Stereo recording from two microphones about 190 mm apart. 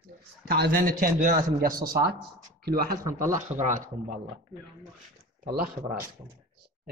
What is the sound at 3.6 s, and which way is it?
Speech, 45° right (ahead or behind).